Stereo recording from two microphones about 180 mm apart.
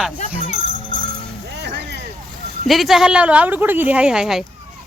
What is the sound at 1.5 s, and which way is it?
Music, 70° right (ahead or behind).